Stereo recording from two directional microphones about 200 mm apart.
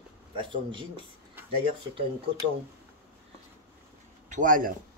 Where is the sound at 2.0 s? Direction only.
25° right (ahead or behind).